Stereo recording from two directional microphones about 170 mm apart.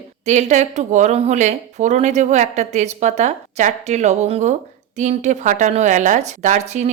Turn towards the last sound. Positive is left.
turn(degrees=-45)  # may be behind; listen again after turning